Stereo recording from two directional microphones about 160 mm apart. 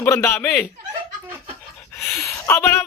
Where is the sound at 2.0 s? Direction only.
15° left (ahead or behind).